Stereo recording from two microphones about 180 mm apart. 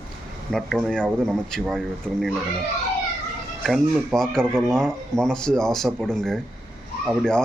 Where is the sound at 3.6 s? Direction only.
Centre (ahead or behind).